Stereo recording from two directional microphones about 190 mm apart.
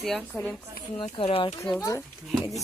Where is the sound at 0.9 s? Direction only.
25° left (ahead or behind).